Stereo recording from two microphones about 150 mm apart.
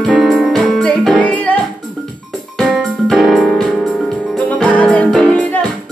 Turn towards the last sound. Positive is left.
turn(degrees=5)  # may be behind; listen again after turning